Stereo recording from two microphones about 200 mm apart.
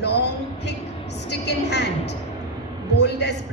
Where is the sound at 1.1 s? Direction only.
60° left (ahead or behind).